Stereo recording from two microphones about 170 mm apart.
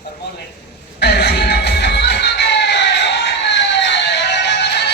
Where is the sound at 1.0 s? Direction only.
80° left.